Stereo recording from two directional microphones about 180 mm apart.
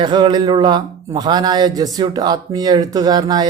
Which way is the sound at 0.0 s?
25° right (ahead or behind).